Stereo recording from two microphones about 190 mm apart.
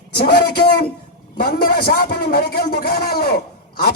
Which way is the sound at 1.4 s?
50° left (ahead or behind).